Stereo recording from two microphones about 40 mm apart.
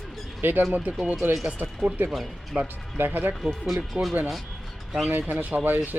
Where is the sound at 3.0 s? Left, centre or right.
Right.